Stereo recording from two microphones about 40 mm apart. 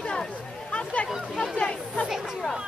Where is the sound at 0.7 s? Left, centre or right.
Left.